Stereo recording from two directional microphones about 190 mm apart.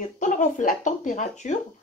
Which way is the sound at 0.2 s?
40° left (ahead or behind).